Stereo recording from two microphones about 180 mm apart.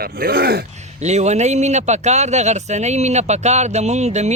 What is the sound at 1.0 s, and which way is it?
Speech, 40° right (ahead or behind).